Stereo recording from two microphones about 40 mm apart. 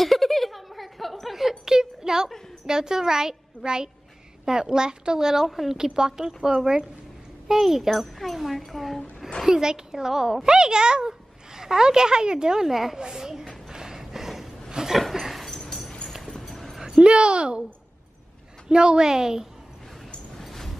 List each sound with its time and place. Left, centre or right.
0.0 s a sound: centre
1.7 s a sound: centre
2.6 s a child's voice: centre
9.5 s speech: centre
12.6 s speech: centre
13.7 s a sound: centre
16.8 s a woman's voice: right
18.7 s speech: right
20.3 s vehicle: centre